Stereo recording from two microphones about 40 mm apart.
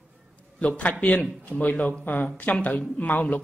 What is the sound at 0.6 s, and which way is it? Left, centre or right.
Speech, left.